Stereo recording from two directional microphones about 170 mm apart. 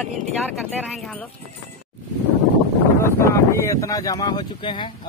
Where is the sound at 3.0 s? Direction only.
15° left (ahead or behind).